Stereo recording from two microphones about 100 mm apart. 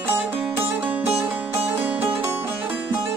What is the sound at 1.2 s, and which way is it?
Music, 20° right (ahead or behind).